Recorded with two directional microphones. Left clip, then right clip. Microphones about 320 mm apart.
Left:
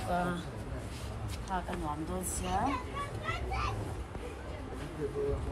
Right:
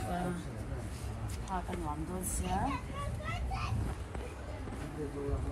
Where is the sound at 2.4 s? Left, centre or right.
Centre.